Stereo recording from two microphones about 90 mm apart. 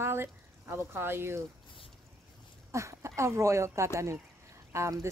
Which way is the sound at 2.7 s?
35° right (ahead or behind).